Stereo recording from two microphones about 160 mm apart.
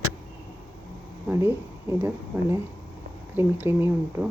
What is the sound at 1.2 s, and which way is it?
A woman's voice, 15° right (ahead or behind).